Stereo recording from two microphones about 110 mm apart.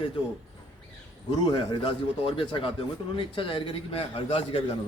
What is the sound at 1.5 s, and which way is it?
A man's voice, 50° left (ahead or behind).